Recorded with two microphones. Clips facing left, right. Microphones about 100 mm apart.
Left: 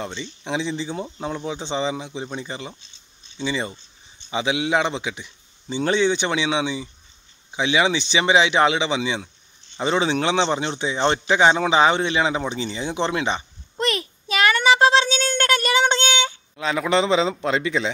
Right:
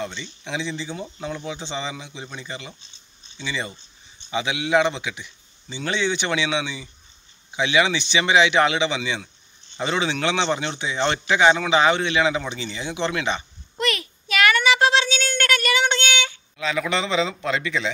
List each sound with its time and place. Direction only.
0.1 s a man's voice: 20° left (ahead or behind)
0.7 s a man's voice: 35° left (ahead or behind)